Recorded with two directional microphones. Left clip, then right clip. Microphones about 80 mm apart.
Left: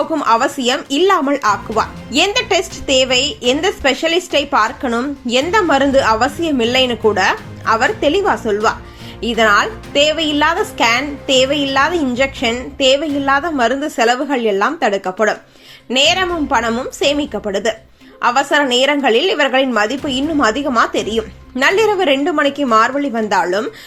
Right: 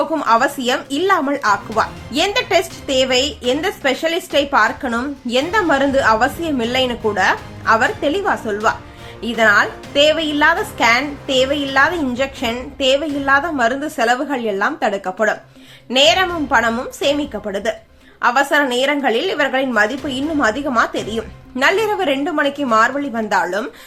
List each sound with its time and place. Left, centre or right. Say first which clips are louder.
0.3 s speech: left 1 dB; left